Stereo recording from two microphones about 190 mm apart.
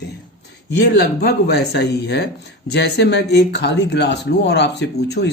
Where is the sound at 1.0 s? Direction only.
60° left (ahead or behind).